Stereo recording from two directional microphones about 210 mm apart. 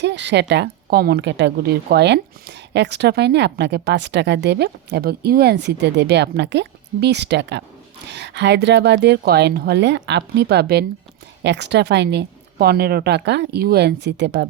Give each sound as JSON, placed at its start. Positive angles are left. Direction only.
{"t": 0.0, "sound": "a woman's voice", "side_deg": -55}